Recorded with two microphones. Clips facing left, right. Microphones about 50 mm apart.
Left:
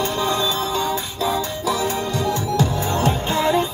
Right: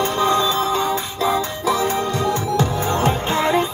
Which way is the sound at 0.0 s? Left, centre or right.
Right.